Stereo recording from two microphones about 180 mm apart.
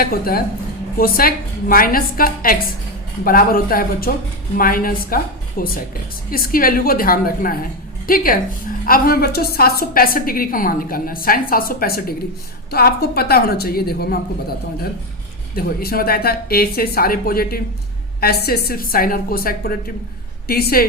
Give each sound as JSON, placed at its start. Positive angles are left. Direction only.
{"t": 0.0, "sound": "a woman's voice", "side_deg": 55}
{"t": 15.5, "sound": "a woman's voice", "side_deg": 55}